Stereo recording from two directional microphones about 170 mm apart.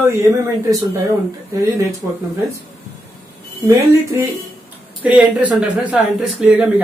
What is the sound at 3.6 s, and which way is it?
Speech, 20° right (ahead or behind).